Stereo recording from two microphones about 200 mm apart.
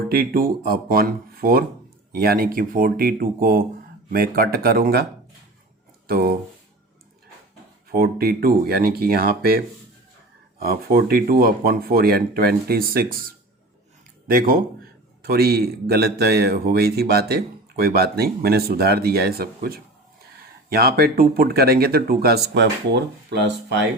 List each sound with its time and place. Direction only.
0.1 s speech: 50° right (ahead or behind)
6.1 s speech: 50° right (ahead or behind)
7.9 s speech: 50° right (ahead or behind)